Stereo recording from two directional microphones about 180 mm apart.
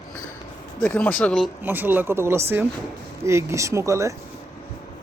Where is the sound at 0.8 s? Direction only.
5° left (ahead or behind).